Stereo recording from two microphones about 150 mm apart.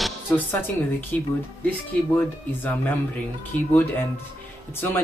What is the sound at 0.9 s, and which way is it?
Speech, 10° left (ahead or behind).